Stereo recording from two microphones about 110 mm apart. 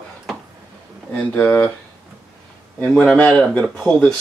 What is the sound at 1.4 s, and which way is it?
Speech, 15° left (ahead or behind).